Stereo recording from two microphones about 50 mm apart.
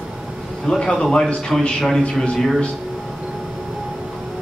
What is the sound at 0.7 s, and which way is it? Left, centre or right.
A man's voice, centre.